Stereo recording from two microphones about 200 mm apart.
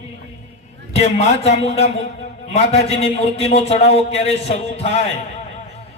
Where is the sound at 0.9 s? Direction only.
30° left (ahead or behind).